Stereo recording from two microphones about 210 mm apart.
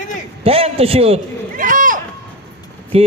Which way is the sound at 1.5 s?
40° right (ahead or behind).